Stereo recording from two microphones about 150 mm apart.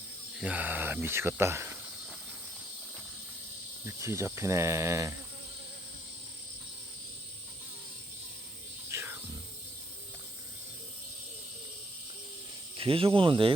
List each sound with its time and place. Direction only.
0.3 s speech: 10° right (ahead or behind)
3.8 s cricket: 20° right (ahead or behind)
8.9 s cricket: 15° right (ahead or behind)
12.7 s speech: 35° right (ahead or behind)